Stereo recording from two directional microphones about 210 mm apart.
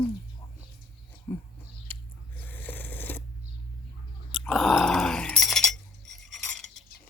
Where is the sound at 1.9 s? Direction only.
5° left (ahead or behind).